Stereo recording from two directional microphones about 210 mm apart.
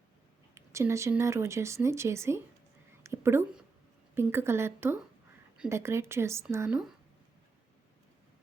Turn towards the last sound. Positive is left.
turn(degrees=-10)  # may be behind; listen again after turning